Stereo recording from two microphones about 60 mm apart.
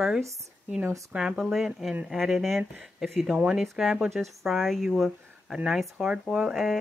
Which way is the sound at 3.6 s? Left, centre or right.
Centre.